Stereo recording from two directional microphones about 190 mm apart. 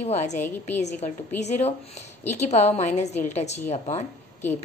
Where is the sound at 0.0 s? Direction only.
35° left (ahead or behind).